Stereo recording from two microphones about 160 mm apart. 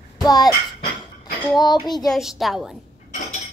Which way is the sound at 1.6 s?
25° left (ahead or behind).